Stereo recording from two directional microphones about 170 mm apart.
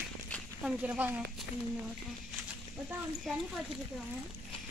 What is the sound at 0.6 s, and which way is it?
Speech, 10° right (ahead or behind).